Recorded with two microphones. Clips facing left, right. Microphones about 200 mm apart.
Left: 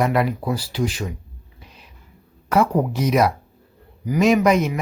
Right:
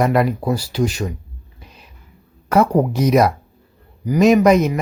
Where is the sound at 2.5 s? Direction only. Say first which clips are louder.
Right 3 dB; 40° right (ahead or behind).